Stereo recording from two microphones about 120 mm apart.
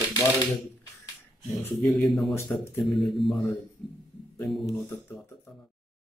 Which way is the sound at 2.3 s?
20° left (ahead or behind).